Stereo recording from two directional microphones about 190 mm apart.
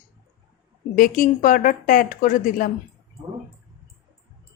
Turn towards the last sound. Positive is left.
turn(degrees=45)  # may be behind; listen again after turning